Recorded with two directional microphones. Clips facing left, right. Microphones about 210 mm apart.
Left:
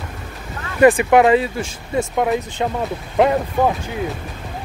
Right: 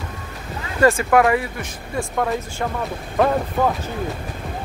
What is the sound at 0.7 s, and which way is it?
Speech, 15° left (ahead or behind).